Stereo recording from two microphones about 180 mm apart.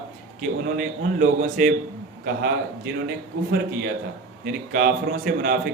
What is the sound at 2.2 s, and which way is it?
A man's voice, 60° right (ahead or behind).